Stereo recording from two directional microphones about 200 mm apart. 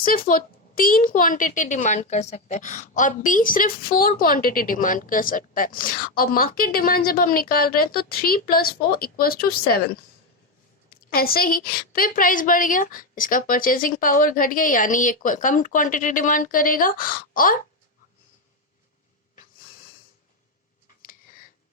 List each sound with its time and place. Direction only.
0.1 s a woman's voice: 45° left (ahead or behind)
11.1 s a woman's voice: 50° left (ahead or behind)